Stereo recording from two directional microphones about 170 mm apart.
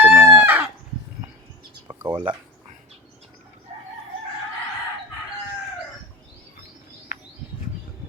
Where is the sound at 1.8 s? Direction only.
15° right (ahead or behind).